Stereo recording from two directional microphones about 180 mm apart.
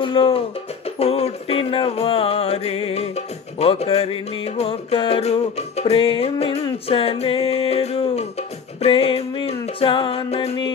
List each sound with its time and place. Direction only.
0.0 s music: 30° left (ahead or behind)